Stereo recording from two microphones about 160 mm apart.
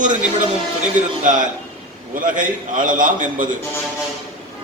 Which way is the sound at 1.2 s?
55° right (ahead or behind).